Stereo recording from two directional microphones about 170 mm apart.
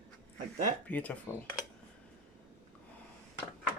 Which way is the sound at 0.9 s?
10° left (ahead or behind).